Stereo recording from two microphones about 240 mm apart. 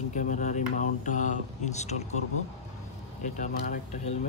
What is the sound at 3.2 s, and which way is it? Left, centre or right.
Speech, left.